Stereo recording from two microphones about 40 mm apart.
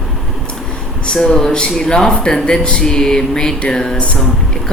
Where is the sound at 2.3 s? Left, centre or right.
Centre.